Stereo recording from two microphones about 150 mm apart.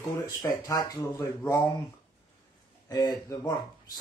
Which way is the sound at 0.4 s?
20° left (ahead or behind).